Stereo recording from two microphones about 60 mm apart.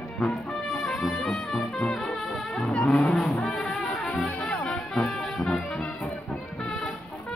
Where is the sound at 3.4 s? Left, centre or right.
Centre.